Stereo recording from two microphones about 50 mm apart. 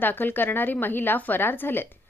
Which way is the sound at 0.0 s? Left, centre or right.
Left.